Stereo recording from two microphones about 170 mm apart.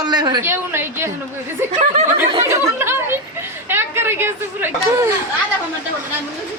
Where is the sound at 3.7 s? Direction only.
15° right (ahead or behind).